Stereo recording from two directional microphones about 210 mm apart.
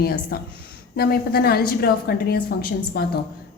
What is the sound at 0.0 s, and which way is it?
A woman's voice, 45° left (ahead or behind).